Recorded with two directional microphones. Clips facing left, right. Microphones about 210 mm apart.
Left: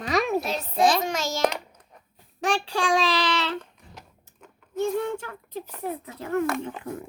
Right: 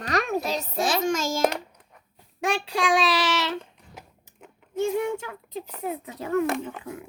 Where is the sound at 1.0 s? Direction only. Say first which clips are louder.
Right 3 dB; 50° right (ahead or behind).